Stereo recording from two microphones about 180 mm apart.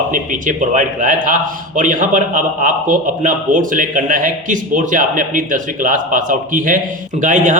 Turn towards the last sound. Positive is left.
turn(degrees=-45)  # may be behind; listen again after turning